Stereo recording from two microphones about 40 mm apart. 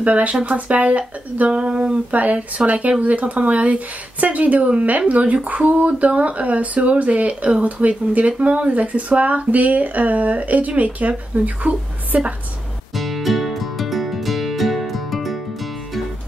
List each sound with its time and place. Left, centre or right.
0.0 s speech: right
2.0 s speech: right
12.9 s music: centre